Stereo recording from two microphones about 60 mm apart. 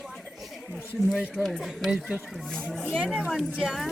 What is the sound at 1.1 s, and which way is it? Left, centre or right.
Speech, centre.